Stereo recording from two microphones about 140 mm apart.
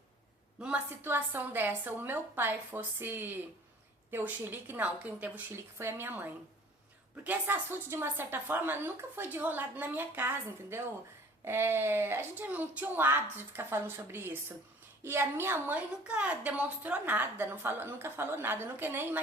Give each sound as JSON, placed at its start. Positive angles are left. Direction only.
{"t": 0.6, "sound": "a woman's voice", "side_deg": -10}